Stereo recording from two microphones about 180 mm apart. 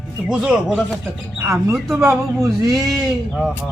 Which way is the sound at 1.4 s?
15° right (ahead or behind).